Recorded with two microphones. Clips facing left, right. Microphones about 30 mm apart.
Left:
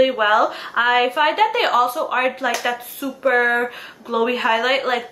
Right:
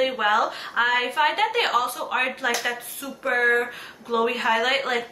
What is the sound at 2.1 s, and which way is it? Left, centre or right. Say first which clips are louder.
Speech: left 1 dB; centre.